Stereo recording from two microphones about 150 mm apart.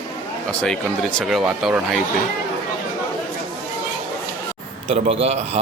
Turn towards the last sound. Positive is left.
turn(degrees=-45)  # may be behind; listen again after turning